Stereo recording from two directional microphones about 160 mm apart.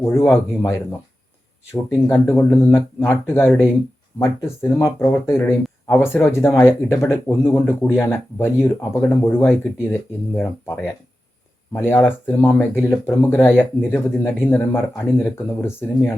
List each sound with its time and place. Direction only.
0.1 s speech: 15° left (ahead or behind)
11.7 s speech: 15° left (ahead or behind)